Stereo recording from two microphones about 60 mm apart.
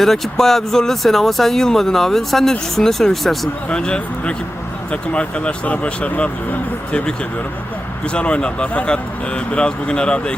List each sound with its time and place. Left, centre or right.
0.0 s speech: centre
3.7 s speech: centre
8.1 s speech: centre